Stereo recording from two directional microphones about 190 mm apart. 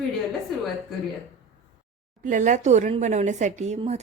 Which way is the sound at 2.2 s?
40° right (ahead or behind).